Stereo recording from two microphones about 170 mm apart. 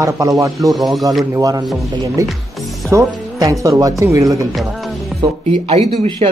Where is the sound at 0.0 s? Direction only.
20° right (ahead or behind).